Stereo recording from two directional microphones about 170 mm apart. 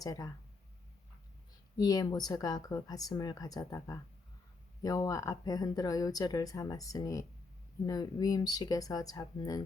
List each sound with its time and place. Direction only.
0.0 s speech: 20° left (ahead or behind)
1.8 s speech: 20° left (ahead or behind)